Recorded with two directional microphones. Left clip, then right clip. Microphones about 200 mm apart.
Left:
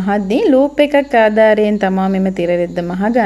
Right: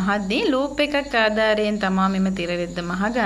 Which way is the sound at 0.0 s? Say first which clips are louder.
Left 7 dB; 30° left (ahead or behind).